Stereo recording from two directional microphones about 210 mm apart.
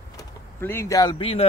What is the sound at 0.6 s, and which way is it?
Speech, 10° left (ahead or behind).